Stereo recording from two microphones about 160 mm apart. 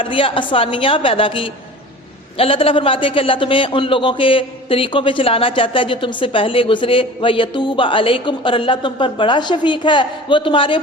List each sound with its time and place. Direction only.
0.0 s a man's voice: 35° left (ahead or behind)